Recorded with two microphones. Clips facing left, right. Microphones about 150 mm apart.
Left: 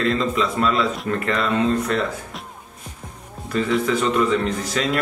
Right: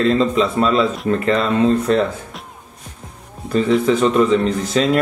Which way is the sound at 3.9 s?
30° right (ahead or behind).